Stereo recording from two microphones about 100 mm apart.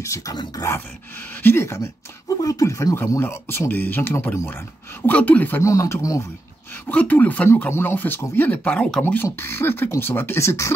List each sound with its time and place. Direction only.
0.0 s speech: 30° left (ahead or behind)
1.4 s speech: 25° left (ahead or behind)
5.6 s speech: 30° left (ahead or behind)
6.9 s speech: 15° left (ahead or behind)
9.0 s speech: 20° left (ahead or behind)